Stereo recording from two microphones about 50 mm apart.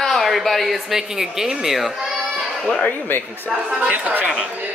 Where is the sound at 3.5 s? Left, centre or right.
Centre.